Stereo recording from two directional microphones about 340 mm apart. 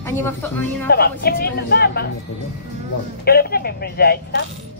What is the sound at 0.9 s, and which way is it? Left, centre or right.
Speech, left.